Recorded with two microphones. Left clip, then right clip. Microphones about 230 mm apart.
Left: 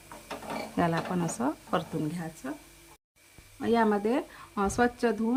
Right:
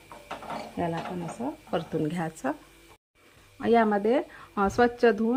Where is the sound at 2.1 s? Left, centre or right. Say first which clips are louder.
Right 8 dB; centre.